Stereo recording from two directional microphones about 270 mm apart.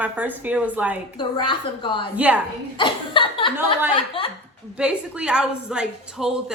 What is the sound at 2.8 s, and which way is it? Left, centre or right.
Chuckle, centre.